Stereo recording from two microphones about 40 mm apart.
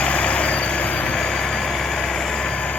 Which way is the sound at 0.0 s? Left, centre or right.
Left.